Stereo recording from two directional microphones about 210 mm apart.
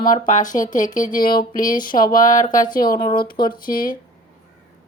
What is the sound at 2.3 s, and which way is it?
Speech, 40° left (ahead or behind).